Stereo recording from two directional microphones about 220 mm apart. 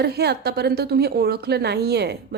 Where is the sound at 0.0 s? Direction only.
45° right (ahead or behind).